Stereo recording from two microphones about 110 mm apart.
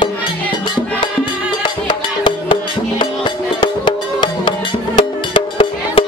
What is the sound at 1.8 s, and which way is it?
Music, 45° left (ahead or behind).